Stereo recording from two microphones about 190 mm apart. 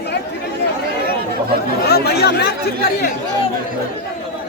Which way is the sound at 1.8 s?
60° left (ahead or behind).